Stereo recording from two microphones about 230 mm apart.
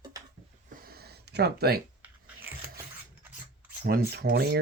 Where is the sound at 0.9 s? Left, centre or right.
Right.